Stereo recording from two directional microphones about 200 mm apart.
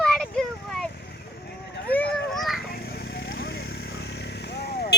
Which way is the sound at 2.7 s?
50° left (ahead or behind).